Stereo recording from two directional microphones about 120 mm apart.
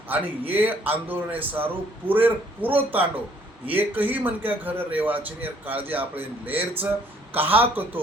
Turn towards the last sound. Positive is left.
turn(degrees=-15)  # may be behind; listen again after turning